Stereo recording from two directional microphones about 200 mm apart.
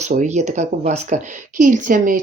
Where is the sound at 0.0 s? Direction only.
35° right (ahead or behind).